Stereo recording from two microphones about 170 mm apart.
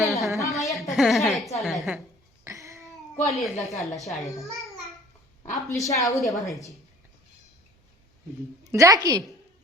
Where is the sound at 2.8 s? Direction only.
Centre (ahead or behind).